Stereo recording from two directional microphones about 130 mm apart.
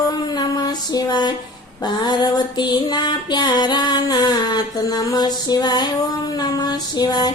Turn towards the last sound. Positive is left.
turn(degrees=35)  # may be behind; listen again after turning